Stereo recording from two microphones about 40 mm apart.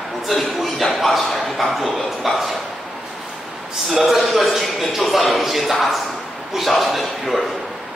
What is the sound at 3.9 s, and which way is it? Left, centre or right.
A man's voice, centre.